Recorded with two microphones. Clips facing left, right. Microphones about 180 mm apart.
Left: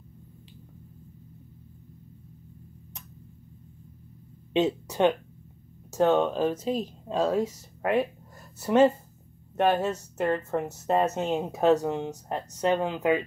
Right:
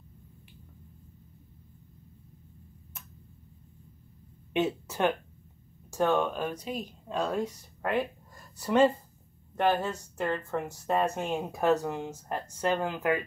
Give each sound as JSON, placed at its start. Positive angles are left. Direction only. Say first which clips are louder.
{"t": 4.6, "sound": "a woman's voice", "louder": "left 4 dB", "side_deg": 20}